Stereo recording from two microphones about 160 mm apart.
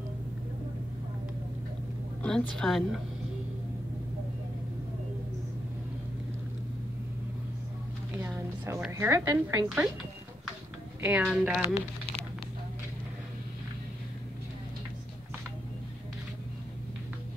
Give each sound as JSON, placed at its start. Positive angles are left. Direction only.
{"t": 2.2, "sound": "a woman's voice", "side_deg": 5}
{"t": 8.1, "sound": "a sound", "side_deg": -15}
{"t": 8.9, "sound": "a woman's voice", "side_deg": -20}
{"t": 11.0, "sound": "a woman's voice", "side_deg": -10}